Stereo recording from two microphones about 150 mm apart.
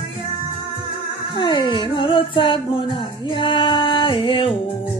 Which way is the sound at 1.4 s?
30° left (ahead or behind).